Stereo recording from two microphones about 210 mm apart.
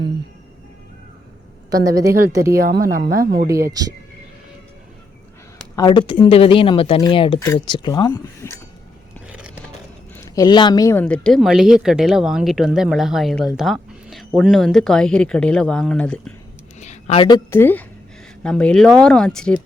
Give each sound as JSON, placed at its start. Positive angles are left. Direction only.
{"t": 1.7, "sound": "a woman's voice", "side_deg": -15}
{"t": 2.6, "sound": "speech", "side_deg": -45}
{"t": 3.5, "sound": "a woman's voice", "side_deg": -15}
{"t": 5.7, "sound": "speech", "side_deg": 20}
{"t": 9.2, "sound": "a sound", "side_deg": -5}
{"t": 10.2, "sound": "speech", "side_deg": 15}
{"t": 16.8, "sound": "a sound", "side_deg": 35}
{"t": 17.2, "sound": "speech", "side_deg": 15}